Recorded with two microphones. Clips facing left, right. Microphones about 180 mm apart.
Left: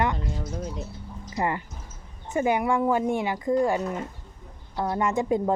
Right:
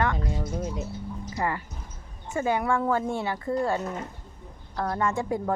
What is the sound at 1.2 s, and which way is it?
A woman's voice, 20° left (ahead or behind).